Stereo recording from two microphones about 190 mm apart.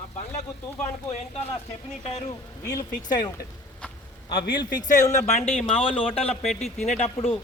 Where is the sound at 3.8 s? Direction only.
5° left (ahead or behind).